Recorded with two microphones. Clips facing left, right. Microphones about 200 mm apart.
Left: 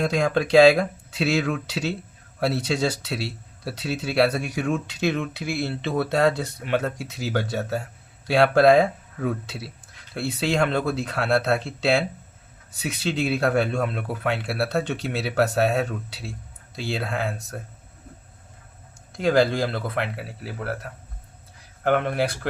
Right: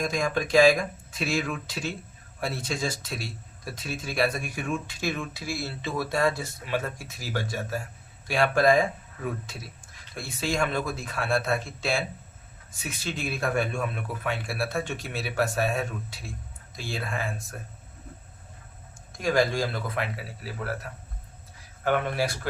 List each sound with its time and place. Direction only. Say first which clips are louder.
0.0 s speech: left 5 dB; 70° left (ahead or behind)
19.1 s speech: left 4 dB; 65° left (ahead or behind)
21.8 s speech: left 4 dB; 60° left (ahead or behind)